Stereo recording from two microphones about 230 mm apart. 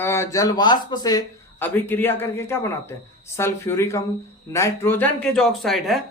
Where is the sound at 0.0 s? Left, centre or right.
Centre.